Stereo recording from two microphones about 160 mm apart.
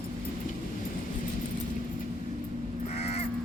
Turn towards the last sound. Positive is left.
turn(degrees=40)  # may be behind; listen again after turning